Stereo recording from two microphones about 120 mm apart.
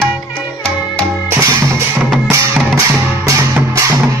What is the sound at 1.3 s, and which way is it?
Music, 25° right (ahead or behind).